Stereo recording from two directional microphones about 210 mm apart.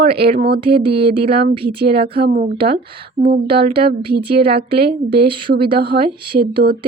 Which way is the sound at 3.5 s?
50° right (ahead or behind).